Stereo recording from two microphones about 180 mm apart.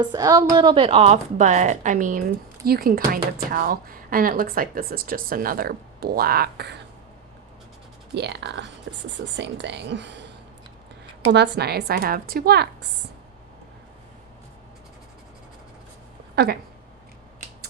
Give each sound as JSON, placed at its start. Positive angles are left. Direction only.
{"t": 0.0, "sound": "speech", "side_deg": -25}
{"t": 2.6, "sound": "speech", "side_deg": -60}
{"t": 8.1, "sound": "speech", "side_deg": -70}
{"t": 8.9, "sound": "speech", "side_deg": -90}
{"t": 9.3, "sound": "speech", "side_deg": -75}
{"t": 11.3, "sound": "a woman's voice", "side_deg": -70}
{"t": 16.3, "sound": "speech", "side_deg": -65}